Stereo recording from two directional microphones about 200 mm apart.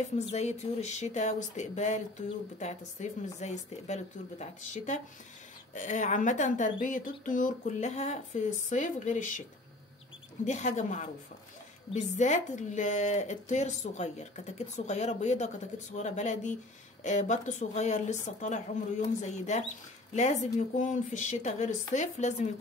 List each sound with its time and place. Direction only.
0.3 s speech: 35° left (ahead or behind)
10.4 s speech: 35° left (ahead or behind)